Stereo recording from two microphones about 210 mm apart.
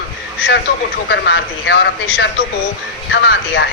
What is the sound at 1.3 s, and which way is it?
Speech, 60° left (ahead or behind).